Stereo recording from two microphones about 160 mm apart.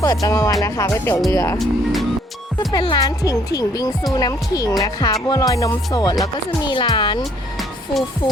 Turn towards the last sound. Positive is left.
turn(degrees=25)  # may be behind; listen again after turning